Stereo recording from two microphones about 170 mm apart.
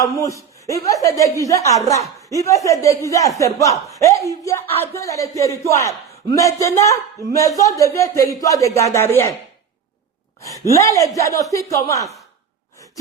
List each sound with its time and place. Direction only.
0.0 s a man's voice: 20° left (ahead or behind)
10.7 s a man's voice: 20° left (ahead or behind)